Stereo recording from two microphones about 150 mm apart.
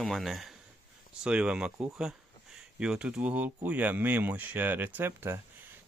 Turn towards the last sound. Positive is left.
turn(degrees=-15)  # may be behind; listen again after turning